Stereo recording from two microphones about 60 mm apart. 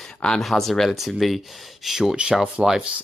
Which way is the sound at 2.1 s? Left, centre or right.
Centre.